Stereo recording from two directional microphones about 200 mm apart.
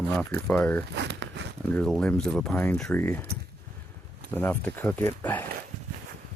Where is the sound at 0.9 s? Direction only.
60° right (ahead or behind).